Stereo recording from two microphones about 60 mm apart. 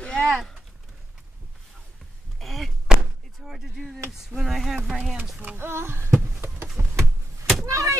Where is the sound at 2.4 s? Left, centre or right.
Centre.